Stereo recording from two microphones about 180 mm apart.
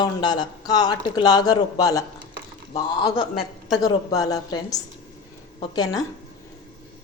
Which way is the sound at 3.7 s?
20° left (ahead or behind).